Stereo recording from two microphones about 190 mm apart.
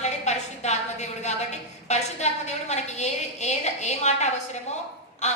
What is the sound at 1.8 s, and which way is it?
A woman's voice, 35° left (ahead or behind).